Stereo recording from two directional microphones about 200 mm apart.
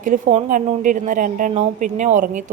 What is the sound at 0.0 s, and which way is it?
A woman's voice, 35° right (ahead or behind).